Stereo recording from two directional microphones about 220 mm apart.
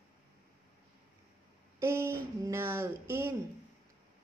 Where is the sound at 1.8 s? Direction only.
15° right (ahead or behind).